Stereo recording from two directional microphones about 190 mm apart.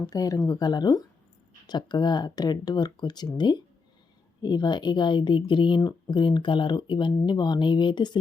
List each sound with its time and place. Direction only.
0.0 s speech: 20° left (ahead or behind)